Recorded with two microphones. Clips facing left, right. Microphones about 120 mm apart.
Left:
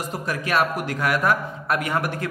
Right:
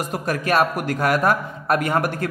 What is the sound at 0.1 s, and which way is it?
A man's voice, 50° right (ahead or behind).